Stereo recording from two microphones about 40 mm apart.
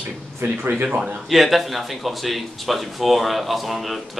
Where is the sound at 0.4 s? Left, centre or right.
Right.